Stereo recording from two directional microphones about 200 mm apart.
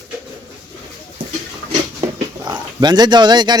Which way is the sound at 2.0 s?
20° right (ahead or behind).